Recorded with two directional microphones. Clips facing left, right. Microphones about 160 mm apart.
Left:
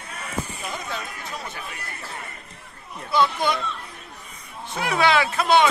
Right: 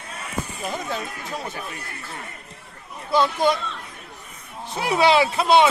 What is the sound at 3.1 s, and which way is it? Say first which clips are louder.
Speech: right 2 dB; 40° right (ahead or behind).